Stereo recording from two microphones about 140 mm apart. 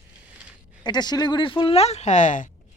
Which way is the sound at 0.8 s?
30° left (ahead or behind).